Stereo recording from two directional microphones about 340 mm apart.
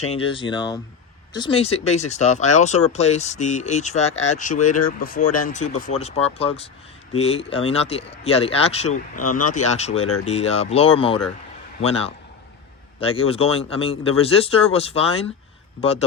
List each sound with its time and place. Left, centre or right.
0.1 s speech: centre
13.6 s speech: centre